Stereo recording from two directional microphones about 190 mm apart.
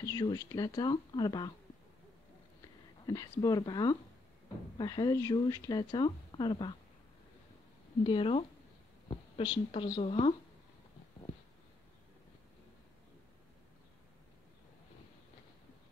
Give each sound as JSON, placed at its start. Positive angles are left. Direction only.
{"t": 0.0, "sound": "speech", "side_deg": 20}
{"t": 3.1, "sound": "speech", "side_deg": 20}
{"t": 8.0, "sound": "speech", "side_deg": 25}